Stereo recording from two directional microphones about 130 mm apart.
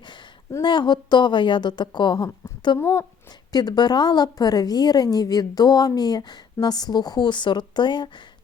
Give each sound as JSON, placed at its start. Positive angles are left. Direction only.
{"t": 0.6, "sound": "a woman's voice", "side_deg": 35}
{"t": 2.8, "sound": "speech", "side_deg": 20}
{"t": 3.5, "sound": "a woman's voice", "side_deg": 30}